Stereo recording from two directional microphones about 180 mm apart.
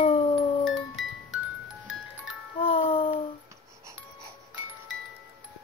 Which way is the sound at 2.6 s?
30° left (ahead or behind).